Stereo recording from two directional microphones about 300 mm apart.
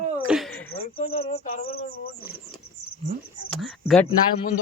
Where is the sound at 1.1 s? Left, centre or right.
Centre.